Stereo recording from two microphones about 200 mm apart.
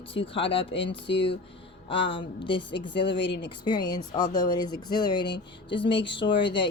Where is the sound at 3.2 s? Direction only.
60° left (ahead or behind).